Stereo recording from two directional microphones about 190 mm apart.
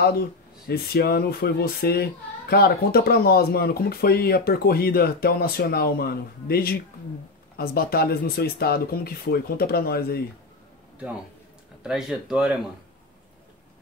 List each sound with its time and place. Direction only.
0.0 s speech: 55° left (ahead or behind)
11.8 s speech: 5° right (ahead or behind)